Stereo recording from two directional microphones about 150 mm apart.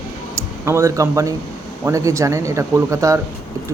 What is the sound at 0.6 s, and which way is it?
A man's voice, 20° right (ahead or behind).